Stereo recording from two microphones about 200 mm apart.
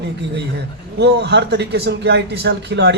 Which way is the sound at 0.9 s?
60° right (ahead or behind).